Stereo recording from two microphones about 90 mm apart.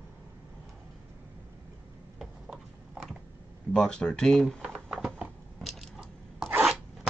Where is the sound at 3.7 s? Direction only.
10° left (ahead or behind).